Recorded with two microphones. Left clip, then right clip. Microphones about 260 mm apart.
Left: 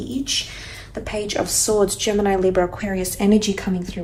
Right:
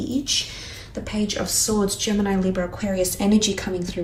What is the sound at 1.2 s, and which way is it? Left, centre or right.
Speech, centre.